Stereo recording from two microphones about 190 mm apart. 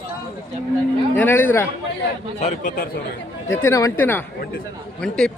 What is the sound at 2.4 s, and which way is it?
Speech, 45° left (ahead or behind).